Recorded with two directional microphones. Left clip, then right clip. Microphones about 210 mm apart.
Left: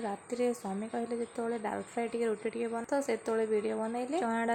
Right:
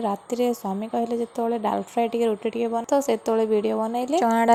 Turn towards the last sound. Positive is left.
turn(degrees=-30)  # may be behind; listen again after turning